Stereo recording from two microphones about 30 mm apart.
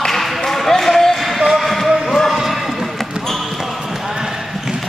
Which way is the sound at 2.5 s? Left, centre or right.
Centre.